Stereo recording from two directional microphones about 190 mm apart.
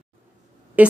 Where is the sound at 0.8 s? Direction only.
10° right (ahead or behind).